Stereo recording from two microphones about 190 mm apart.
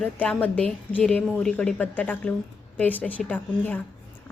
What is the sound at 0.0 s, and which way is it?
A woman's voice, 5° left (ahead or behind).